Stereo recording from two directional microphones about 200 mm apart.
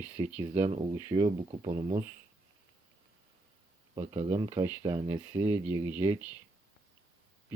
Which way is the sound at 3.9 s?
20° right (ahead or behind).